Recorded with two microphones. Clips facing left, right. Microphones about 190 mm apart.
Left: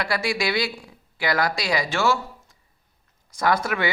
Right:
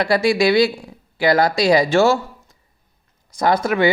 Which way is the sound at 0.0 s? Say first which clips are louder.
Right 9 dB; 25° right (ahead or behind).